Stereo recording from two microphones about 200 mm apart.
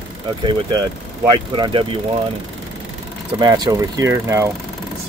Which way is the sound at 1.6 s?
25° right (ahead or behind).